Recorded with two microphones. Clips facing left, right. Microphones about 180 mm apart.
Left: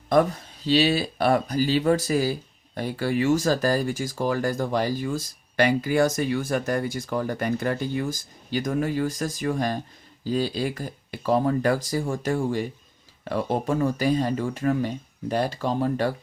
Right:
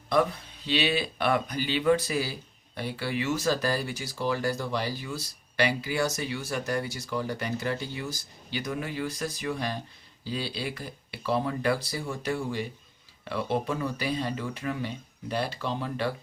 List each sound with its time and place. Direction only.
0.1 s speech: 45° left (ahead or behind)